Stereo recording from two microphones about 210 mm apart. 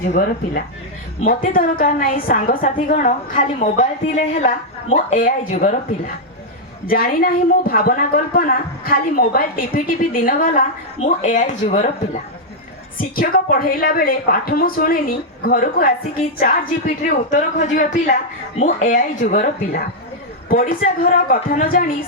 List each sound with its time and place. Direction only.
0.1 s a woman's voice: 40° left (ahead or behind)
6.8 s a woman's voice: 45° left (ahead or behind)
13.1 s a woman's voice: 40° left (ahead or behind)